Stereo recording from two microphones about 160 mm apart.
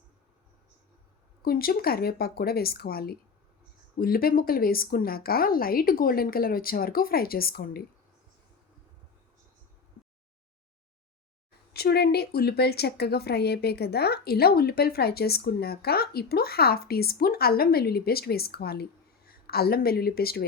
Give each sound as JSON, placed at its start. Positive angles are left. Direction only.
{"t": 1.4, "sound": "a woman's voice", "side_deg": 70}
{"t": 11.7, "sound": "a woman's voice", "side_deg": 85}